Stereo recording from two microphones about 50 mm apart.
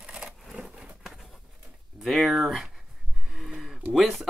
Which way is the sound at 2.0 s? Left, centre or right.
Centre.